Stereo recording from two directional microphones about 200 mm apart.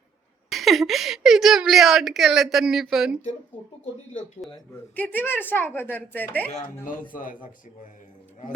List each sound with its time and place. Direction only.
0.5 s a woman's voice: centre (ahead or behind)
4.4 s a woman's voice: centre (ahead or behind)
6.5 s a man's voice: 45° left (ahead or behind)